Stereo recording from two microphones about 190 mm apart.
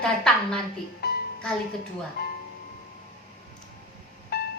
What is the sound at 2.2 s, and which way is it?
Speech, 60° left (ahead or behind).